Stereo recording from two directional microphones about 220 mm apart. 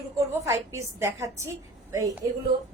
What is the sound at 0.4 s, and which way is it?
A woman's voice, 15° right (ahead or behind).